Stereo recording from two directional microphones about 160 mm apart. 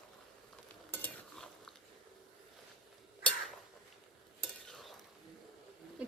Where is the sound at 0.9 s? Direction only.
5° left (ahead or behind).